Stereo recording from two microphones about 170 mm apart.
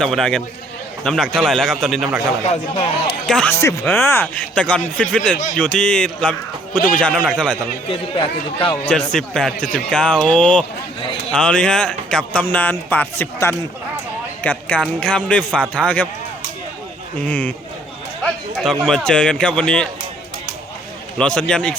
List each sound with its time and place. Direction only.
0.0 s a man's voice: 5° left (ahead or behind)
3.2 s a man's voice: 5° left (ahead or behind)
7.9 s speech: 30° left (ahead or behind)
9.1 s a man's voice: 5° left (ahead or behind)
17.2 s a man's voice: 5° left (ahead or behind)
21.2 s a man's voice: 5° left (ahead or behind)